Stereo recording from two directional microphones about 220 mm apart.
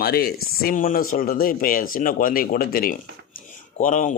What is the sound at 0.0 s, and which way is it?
Speech, 45° left (ahead or behind).